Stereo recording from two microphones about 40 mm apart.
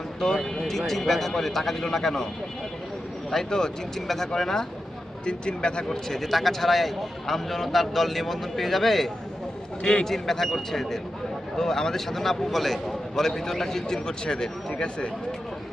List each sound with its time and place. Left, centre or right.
0.6 s a man's voice: centre
3.2 s a man's voice: centre
5.2 s speech: left
6.1 s a man's voice: centre
9.8 s a man's voice: centre